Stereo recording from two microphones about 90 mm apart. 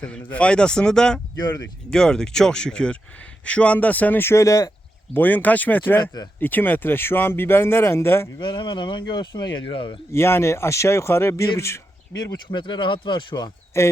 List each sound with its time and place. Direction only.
0.0 s speech: 15° left (ahead or behind); by 4.7 s 40° left (ahead or behind)
5.1 s speech: 20° left (ahead or behind)
8.4 s speech: 60° left (ahead or behind)
10.1 s speech: 30° left (ahead or behind)
12.1 s speech: 45° left (ahead or behind)
12.5 s speech: 65° left (ahead or behind)
13.7 s speech: 30° left (ahead or behind)